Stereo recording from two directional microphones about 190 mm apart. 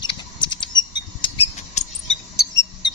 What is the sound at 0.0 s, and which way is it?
Mouse, 25° left (ahead or behind).